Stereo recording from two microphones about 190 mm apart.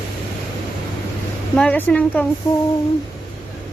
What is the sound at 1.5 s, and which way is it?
Speech, 5° left (ahead or behind).